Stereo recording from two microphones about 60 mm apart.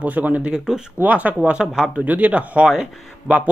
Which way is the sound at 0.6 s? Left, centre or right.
Centre.